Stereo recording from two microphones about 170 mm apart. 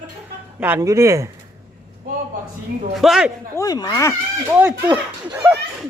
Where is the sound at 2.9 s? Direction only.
Centre (ahead or behind).